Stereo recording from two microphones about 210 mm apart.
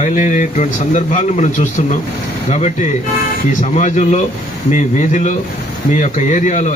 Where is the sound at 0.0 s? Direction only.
35° left (ahead or behind).